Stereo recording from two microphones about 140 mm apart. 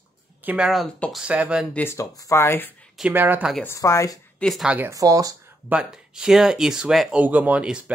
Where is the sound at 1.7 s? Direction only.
15° left (ahead or behind).